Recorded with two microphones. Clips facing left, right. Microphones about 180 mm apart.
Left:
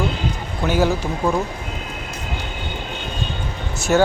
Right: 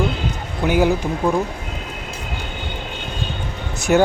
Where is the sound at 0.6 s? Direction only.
15° right (ahead or behind).